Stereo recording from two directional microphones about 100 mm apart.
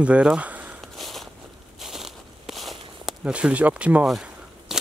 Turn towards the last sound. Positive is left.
turn(degrees=-5)  # may be behind; listen again after turning